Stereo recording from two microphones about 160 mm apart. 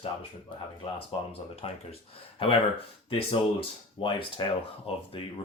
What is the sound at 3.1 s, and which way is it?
Speech, 35° left (ahead or behind).